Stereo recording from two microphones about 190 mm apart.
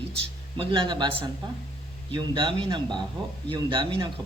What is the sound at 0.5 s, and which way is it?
A man's voice, 25° right (ahead or behind).